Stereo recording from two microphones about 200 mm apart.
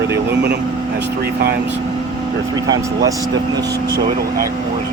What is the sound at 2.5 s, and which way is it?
Speech, 20° right (ahead or behind).